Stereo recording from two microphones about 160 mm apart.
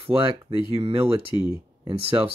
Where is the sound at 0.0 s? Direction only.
35° right (ahead or behind).